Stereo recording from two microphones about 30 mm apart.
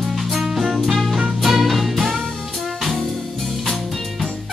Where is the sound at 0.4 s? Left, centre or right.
Centre.